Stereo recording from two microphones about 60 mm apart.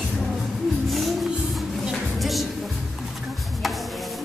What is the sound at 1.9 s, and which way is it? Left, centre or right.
Music, centre.